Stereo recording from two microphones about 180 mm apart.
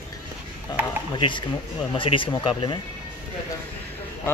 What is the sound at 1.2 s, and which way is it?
Speech, 25° left (ahead or behind).